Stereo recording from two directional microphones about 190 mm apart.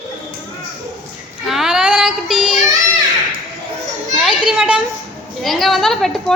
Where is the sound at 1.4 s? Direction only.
Centre (ahead or behind).